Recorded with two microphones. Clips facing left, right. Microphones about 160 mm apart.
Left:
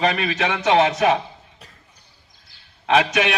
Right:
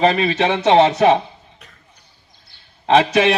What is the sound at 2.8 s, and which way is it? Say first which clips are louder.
Speech: right 5 dB; 30° right (ahead or behind).